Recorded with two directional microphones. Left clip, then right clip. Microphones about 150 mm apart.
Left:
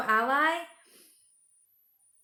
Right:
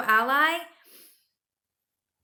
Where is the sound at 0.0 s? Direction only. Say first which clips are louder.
Right 3 dB; 20° right (ahead or behind).